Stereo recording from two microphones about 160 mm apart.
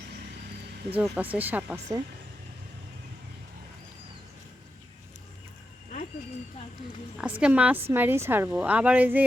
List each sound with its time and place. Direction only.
0.9 s a woman's voice: 10° right (ahead or behind)
7.2 s a woman's voice: 5° right (ahead or behind)